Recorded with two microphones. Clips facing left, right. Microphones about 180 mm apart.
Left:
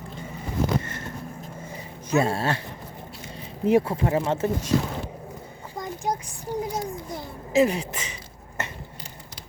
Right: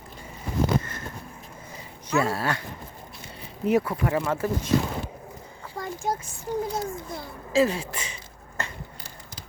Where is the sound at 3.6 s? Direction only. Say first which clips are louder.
Left 2 dB; 25° left (ahead or behind).